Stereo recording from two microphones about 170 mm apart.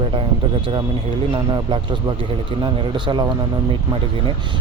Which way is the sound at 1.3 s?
25° right (ahead or behind).